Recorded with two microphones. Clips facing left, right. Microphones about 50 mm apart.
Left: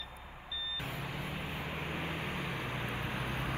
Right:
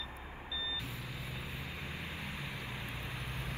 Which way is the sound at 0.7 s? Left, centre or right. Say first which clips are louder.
Left 4 dB; left.